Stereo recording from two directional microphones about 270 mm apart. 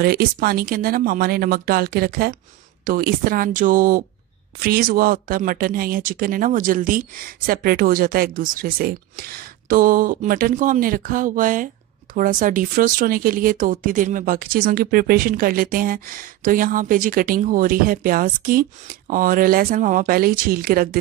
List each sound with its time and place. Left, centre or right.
0.0 s speech: right